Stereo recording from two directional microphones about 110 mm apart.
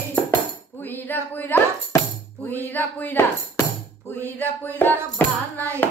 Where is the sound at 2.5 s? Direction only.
15° left (ahead or behind).